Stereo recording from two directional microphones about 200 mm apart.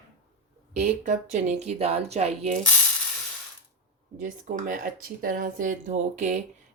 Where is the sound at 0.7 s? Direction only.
40° right (ahead or behind).